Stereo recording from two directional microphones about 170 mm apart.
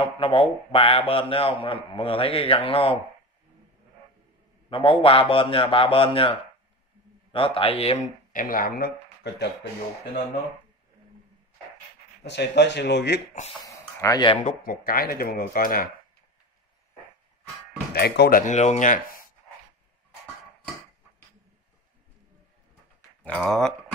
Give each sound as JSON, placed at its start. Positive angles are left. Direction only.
{"t": 0.0, "sound": "a man's voice", "side_deg": 35}
{"t": 4.6, "sound": "a man's voice", "side_deg": 30}
{"t": 7.3, "sound": "a man's voice", "side_deg": 30}
{"t": 8.3, "sound": "speech", "side_deg": 55}
{"t": 12.3, "sound": "speech", "side_deg": 90}
{"t": 13.7, "sound": "a sound", "side_deg": 20}
{"t": 14.4, "sound": "speech", "side_deg": 55}
{"t": 17.9, "sound": "speech", "side_deg": 70}
{"t": 18.4, "sound": "speech", "side_deg": 45}
{"t": 23.2, "sound": "a sound", "side_deg": 5}